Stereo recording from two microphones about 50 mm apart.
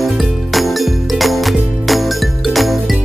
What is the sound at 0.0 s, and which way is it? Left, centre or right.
Music, centre.